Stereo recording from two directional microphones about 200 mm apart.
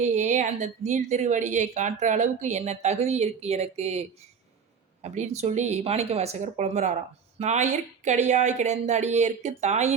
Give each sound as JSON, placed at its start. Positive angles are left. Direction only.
{"t": 0.0, "sound": "a woman's voice", "side_deg": -35}